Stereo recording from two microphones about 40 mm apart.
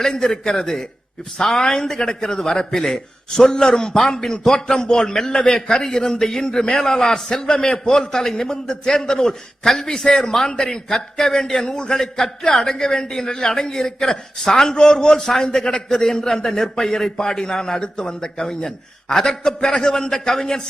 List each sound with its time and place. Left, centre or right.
0.0 s a man's voice: centre